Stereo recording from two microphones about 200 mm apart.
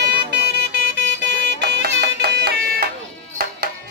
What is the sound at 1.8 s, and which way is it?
Music, 55° right (ahead or behind).